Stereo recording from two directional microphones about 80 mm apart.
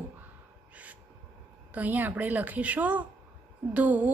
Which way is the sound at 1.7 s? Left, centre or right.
Right.